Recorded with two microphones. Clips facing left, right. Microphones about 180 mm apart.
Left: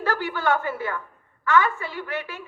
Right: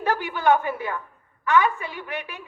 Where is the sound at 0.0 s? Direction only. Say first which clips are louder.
Right 2 dB; 15° right (ahead or behind).